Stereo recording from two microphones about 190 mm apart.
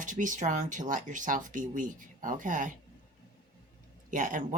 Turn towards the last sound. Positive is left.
turn(degrees=-45)  # may be behind; listen again after turning